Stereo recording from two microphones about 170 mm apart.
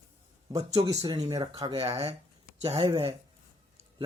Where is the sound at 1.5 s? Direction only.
35° right (ahead or behind).